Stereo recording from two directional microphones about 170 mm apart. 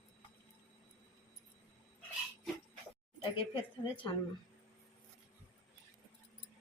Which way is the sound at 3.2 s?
30° left (ahead or behind).